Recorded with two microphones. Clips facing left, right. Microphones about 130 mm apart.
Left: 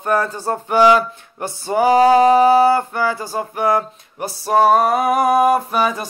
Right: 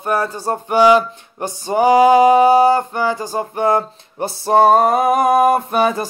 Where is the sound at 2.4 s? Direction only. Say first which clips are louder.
Right 1 dB; 25° right (ahead or behind).